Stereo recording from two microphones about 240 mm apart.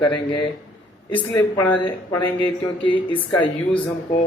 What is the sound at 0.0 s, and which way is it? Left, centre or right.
Speech, centre.